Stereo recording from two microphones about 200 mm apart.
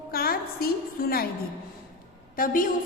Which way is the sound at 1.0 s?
45° left (ahead or behind).